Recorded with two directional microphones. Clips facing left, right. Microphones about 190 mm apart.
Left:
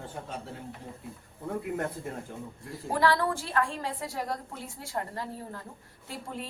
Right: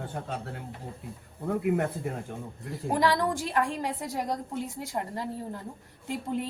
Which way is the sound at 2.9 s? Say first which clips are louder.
Right 1 dB; 15° right (ahead or behind).